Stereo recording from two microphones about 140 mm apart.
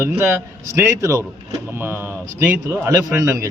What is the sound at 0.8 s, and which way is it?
Speech, 20° right (ahead or behind).